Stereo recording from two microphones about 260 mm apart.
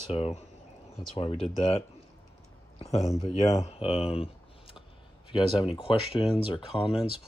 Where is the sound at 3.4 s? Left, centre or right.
Centre.